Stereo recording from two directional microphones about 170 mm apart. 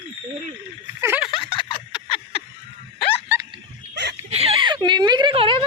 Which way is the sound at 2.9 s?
35° left (ahead or behind).